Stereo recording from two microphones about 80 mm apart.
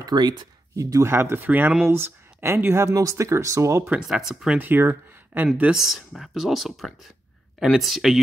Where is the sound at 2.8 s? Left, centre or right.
Right.